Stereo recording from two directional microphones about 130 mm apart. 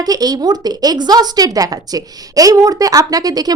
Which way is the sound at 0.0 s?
30° right (ahead or behind).